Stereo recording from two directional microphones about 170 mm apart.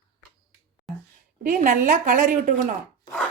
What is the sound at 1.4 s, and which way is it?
A woman's voice, 50° right (ahead or behind).